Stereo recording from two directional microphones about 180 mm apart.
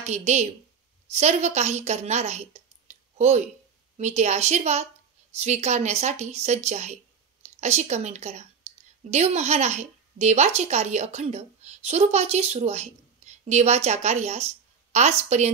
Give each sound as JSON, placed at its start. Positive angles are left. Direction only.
{"t": 0.0, "sound": "a woman's voice", "side_deg": -40}